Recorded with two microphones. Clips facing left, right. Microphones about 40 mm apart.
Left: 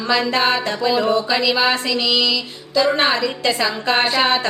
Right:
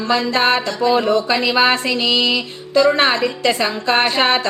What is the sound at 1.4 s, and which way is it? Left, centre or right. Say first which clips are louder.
Music: right 2 dB; right.